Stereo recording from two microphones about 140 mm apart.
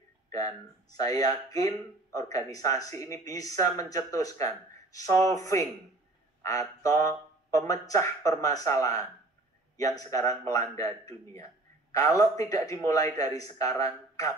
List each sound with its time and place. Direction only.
0.3 s speech: 25° left (ahead or behind)
6.8 s a sound: 25° left (ahead or behind)
7.8 s speech: 25° left (ahead or behind)